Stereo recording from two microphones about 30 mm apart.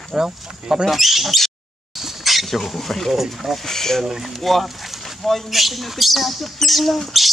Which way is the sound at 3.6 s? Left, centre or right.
Centre.